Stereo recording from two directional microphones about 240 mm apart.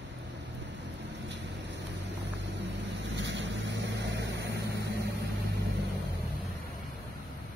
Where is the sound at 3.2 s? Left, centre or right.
Right.